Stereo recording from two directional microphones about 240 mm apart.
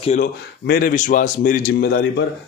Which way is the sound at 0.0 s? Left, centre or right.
Left.